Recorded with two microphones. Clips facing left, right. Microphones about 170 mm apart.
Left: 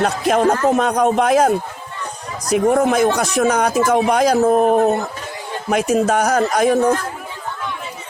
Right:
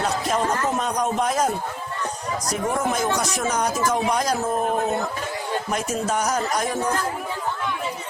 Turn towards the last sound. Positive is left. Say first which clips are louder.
# left 9 dB
turn(degrees=70)  # may be behind; listen again after turning